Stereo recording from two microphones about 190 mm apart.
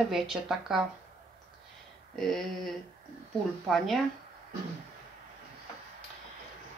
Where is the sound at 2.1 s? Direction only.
Centre (ahead or behind).